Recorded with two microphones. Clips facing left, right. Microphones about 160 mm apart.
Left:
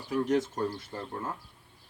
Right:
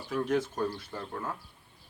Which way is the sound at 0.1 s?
20° left (ahead or behind).